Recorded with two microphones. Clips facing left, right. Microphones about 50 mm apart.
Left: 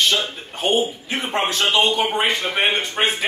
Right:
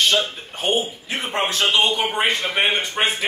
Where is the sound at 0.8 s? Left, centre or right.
Left.